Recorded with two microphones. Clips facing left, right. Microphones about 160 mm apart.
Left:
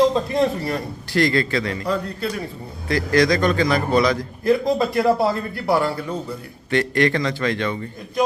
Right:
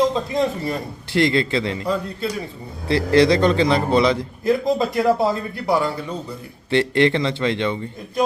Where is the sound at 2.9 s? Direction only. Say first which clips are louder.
Right 3 dB; 30° right (ahead or behind).